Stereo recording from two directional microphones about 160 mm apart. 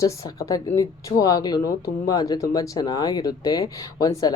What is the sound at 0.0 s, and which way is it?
Speech, 20° left (ahead or behind).